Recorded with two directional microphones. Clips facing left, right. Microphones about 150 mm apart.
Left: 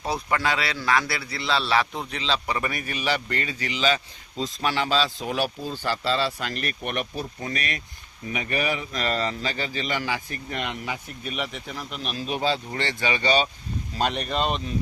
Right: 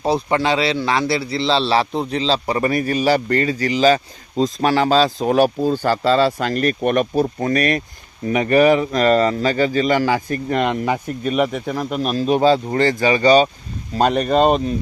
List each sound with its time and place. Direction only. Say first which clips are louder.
0.0 s a man's voice: right 8 dB; 30° right (ahead or behind); by 14.6 s 45° right (ahead or behind)